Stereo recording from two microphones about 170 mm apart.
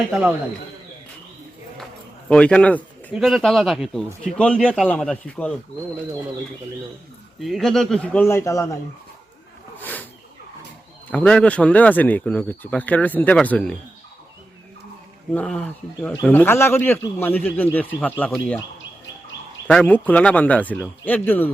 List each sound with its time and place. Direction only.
0.1 s speech: 5° right (ahead or behind)
2.3 s speech: 5° left (ahead or behind)
3.1 s speech: 5° right (ahead or behind)
4.9 s speech: 5° left (ahead or behind)
7.3 s speech: centre (ahead or behind); by 8.8 s 20° left (ahead or behind)
9.7 s a sound: 10° left (ahead or behind)
11.1 s speech: 5° left (ahead or behind)
15.3 s speech: 5° left (ahead or behind)
19.6 s speech: 10° left (ahead or behind)